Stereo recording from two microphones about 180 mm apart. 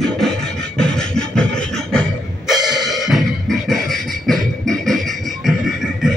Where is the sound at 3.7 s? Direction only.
Centre (ahead or behind).